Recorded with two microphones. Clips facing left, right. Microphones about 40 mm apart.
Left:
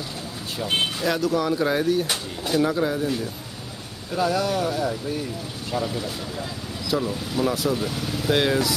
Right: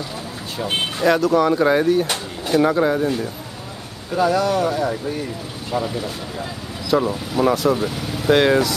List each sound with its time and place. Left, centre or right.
0.6 s speech: centre
2.6 s speech: right
4.1 s speech: centre